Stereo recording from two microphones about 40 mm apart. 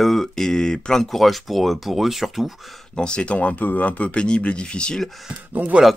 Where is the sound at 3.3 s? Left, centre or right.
Left.